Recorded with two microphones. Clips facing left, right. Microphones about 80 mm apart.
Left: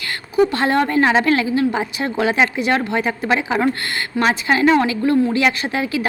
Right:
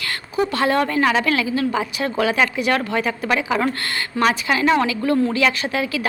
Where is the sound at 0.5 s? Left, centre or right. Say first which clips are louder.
Left 2 dB; left.